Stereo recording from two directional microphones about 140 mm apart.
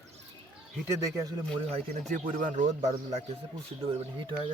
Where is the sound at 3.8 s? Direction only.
40° right (ahead or behind).